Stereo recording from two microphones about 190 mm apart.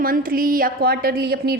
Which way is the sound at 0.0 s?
50° right (ahead or behind).